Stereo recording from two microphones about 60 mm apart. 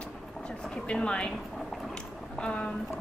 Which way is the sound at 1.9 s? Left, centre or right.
Centre.